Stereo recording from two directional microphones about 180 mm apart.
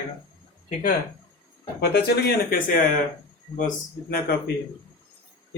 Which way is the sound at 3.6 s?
50° left (ahead or behind).